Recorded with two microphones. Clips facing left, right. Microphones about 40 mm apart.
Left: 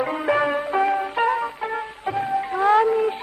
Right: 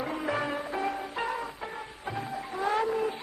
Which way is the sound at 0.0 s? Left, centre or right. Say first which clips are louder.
Left 10 dB; left.